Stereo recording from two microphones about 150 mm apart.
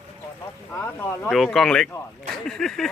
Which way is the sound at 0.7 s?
15° left (ahead or behind).